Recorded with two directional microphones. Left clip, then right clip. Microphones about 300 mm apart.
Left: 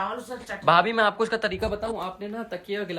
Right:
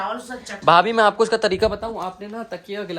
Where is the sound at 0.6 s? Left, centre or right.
Centre.